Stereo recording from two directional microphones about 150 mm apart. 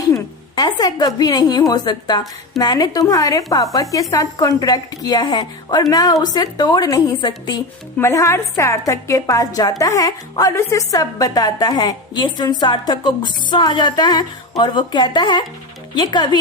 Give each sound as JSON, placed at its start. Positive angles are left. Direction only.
{"t": 0.1, "sound": "a woman's voice", "side_deg": 25}
{"t": 7.9, "sound": "a woman's voice", "side_deg": 20}